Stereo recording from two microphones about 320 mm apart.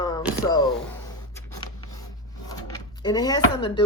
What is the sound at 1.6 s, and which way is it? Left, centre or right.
Writing, centre.